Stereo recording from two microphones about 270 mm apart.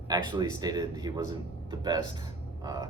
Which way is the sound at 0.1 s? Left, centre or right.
Centre.